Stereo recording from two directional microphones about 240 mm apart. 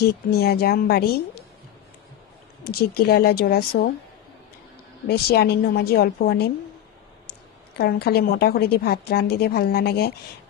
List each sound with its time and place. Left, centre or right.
0.0 s a woman's voice: left
2.6 s a woman's voice: left
5.0 s a woman's voice: left
7.7 s a woman's voice: left